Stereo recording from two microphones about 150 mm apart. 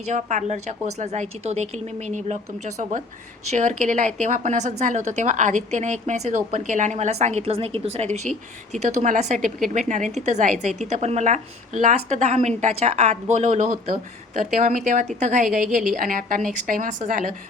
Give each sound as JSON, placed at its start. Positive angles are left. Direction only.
{"t": 0.1, "sound": "a woman's voice", "side_deg": -55}